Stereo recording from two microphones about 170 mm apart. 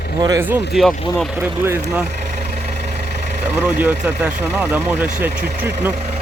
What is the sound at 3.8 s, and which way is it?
Speech, 10° right (ahead or behind).